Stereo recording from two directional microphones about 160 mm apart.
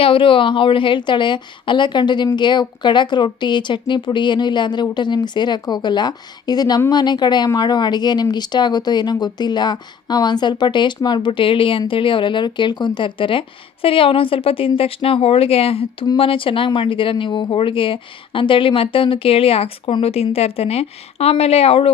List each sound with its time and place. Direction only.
0.0 s a woman's voice: 35° left (ahead or behind)